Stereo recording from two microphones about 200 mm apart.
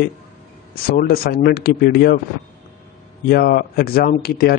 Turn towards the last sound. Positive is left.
turn(degrees=50)  # may be behind; listen again after turning